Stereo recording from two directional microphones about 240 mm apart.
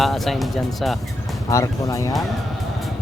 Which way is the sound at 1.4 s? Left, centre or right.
Centre.